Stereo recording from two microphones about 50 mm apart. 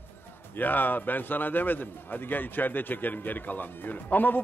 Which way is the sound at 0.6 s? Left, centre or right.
Left.